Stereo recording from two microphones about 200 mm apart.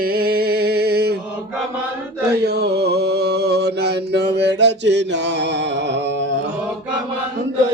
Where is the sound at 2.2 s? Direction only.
55° right (ahead or behind).